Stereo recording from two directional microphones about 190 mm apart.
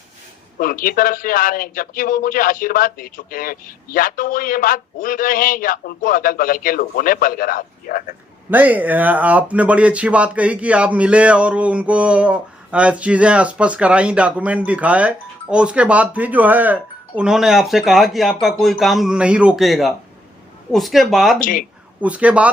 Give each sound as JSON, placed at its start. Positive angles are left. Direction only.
{"t": 0.6, "sound": "speech", "side_deg": 50}
{"t": 8.4, "sound": "speech", "side_deg": -10}
{"t": 21.3, "sound": "speech", "side_deg": 45}
{"t": 22.0, "sound": "speech", "side_deg": -5}